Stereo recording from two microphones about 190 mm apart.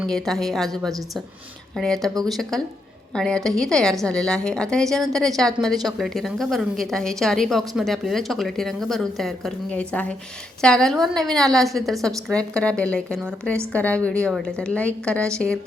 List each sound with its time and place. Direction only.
0.1 s a woman's voice: centre (ahead or behind)